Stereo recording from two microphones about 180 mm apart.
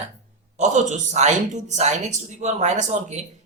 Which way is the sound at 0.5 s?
40° right (ahead or behind).